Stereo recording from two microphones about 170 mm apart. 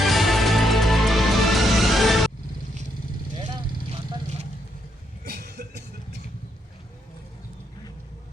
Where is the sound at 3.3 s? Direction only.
25° right (ahead or behind).